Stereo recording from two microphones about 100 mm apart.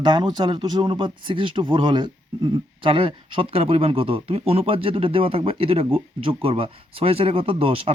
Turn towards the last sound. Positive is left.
turn(degrees=-70)  # may be behind; listen again after turning